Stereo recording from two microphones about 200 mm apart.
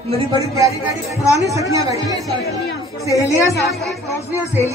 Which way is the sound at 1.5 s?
15° right (ahead or behind).